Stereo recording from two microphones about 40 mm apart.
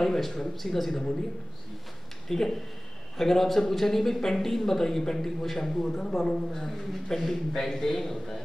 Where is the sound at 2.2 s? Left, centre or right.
Centre.